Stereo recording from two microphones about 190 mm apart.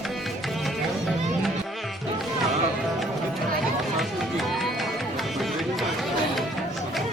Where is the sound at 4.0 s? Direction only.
Centre (ahead or behind).